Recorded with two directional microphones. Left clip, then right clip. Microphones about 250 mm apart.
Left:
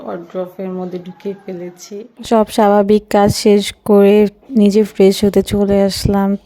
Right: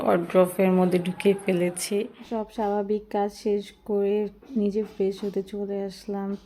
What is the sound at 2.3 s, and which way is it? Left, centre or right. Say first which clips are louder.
Speech: left 17 dB; left.